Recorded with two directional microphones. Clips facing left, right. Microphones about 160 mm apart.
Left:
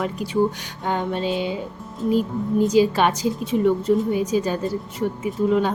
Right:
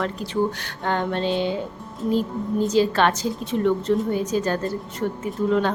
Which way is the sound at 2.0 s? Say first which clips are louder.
Left 2 dB; 5° left (ahead or behind).